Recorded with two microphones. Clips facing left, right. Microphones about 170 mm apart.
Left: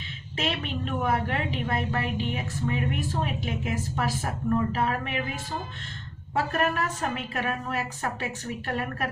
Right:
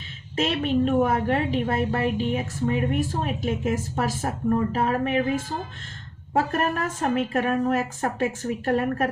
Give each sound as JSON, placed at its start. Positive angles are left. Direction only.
{"t": 0.3, "sound": "a woman's voice", "side_deg": -40}